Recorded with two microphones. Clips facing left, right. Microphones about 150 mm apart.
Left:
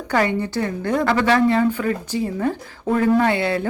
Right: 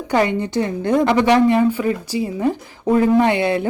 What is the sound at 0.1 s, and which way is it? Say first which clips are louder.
A woman's voice: right 2 dB; 20° right (ahead or behind).